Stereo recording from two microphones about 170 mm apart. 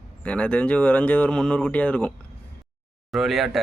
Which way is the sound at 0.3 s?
5° left (ahead or behind).